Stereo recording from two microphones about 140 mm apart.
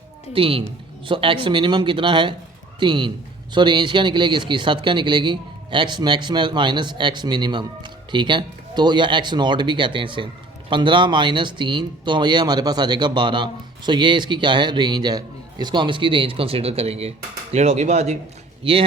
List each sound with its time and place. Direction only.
0.3 s speech: 40° right (ahead or behind)
18.6 s speech: 40° right (ahead or behind)